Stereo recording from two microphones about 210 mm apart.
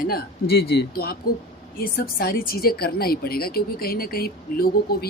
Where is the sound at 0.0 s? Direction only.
45° left (ahead or behind).